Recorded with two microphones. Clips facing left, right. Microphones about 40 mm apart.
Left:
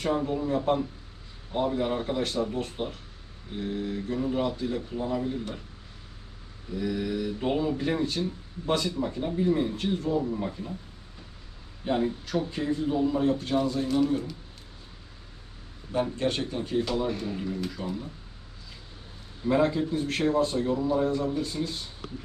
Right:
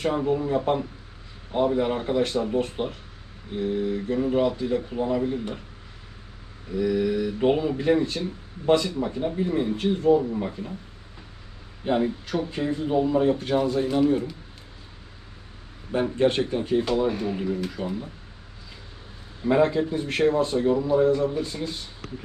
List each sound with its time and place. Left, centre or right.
0.0 s speech: centre
4.4 s speech: centre
4.9 s speech: right
6.7 s speech: centre
7.3 s speech: right
11.9 s speech: centre
15.9 s speech: right
19.5 s speech: centre